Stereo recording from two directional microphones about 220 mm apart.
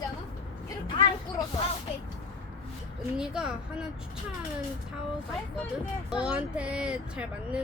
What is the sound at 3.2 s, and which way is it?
Speech, 5° right (ahead or behind).